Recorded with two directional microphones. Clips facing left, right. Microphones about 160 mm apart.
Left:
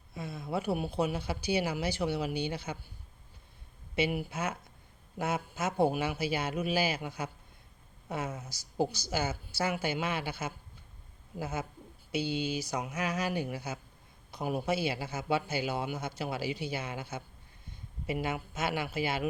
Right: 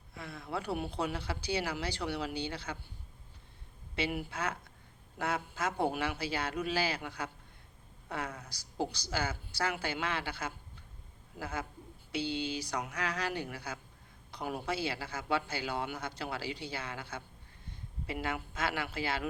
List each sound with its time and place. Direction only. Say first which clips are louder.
0.1 s a man's voice: left 4 dB; 15° left (ahead or behind)
3.9 s a man's voice: left 4 dB; 10° left (ahead or behind)
8.8 s a man's voice: left 4 dB; 10° left (ahead or behind)